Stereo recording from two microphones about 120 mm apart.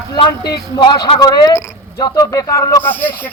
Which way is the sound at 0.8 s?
40° left (ahead or behind).